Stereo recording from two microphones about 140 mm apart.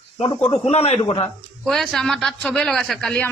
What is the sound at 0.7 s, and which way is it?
Speech, 50° left (ahead or behind).